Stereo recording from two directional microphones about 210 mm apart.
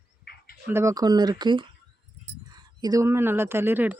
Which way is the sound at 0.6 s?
15° right (ahead or behind).